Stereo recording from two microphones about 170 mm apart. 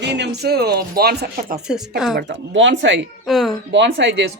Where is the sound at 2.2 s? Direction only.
90° right.